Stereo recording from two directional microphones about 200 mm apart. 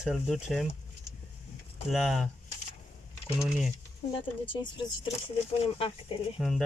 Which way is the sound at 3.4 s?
Centre (ahead or behind).